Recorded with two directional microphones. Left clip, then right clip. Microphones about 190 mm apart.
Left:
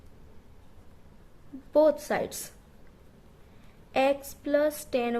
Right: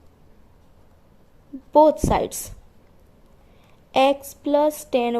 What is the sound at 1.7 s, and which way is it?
Speech, 25° right (ahead or behind).